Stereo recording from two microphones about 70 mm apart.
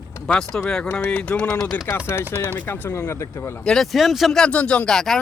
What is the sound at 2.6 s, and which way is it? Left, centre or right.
Speech, left.